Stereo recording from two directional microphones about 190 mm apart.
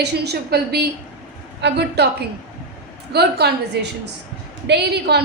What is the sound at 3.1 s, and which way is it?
A woman's voice, 60° right (ahead or behind).